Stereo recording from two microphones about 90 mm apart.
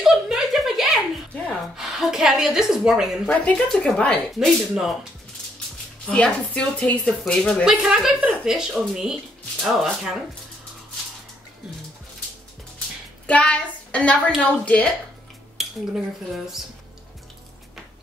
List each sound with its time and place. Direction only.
0.0 s a sound: 5° right (ahead or behind)
1.8 s speech: 5° right (ahead or behind)
3.3 s speech: 15° left (ahead or behind)
4.3 s speech: centre (ahead or behind)
6.0 s speech: 15° left (ahead or behind)
7.6 s speech: 5° right (ahead or behind)
13.3 s a woman's voice: 15° left (ahead or behind)
15.6 s dishes: 5° right (ahead or behind)